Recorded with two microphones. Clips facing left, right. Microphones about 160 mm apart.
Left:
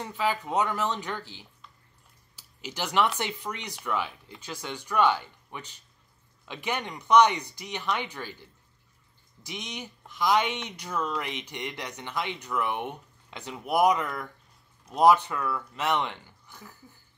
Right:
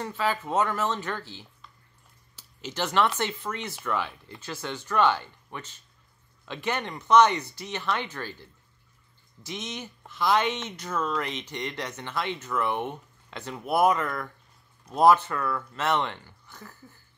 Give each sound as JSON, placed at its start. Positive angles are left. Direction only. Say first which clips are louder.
{"t": 0.0, "sound": "speech", "louder": "even", "side_deg": 15}
{"t": 2.3, "sound": "a sound", "louder": "right 3 dB", "side_deg": 10}
{"t": 3.2, "sound": "speech", "louder": "right 3 dB", "side_deg": 15}